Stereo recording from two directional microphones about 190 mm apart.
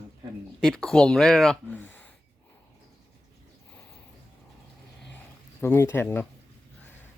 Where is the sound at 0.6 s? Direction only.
5° left (ahead or behind).